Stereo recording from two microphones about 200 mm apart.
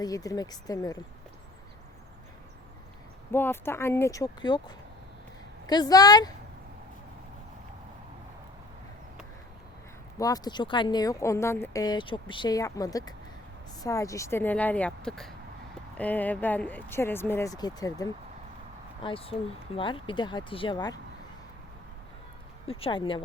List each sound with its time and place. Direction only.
0.0 s speech: 15° left (ahead or behind)
3.3 s speech: 10° left (ahead or behind)
5.6 s speech: 20° left (ahead or behind)
10.2 s speech: 20° left (ahead or behind)
22.6 s speech: 30° left (ahead or behind)